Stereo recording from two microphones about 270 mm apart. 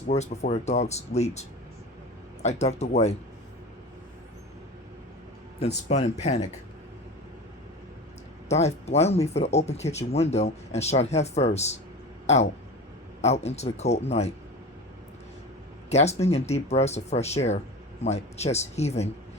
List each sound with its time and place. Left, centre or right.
0.1 s speech: left
5.5 s speech: left
8.4 s speech: left
15.9 s speech: left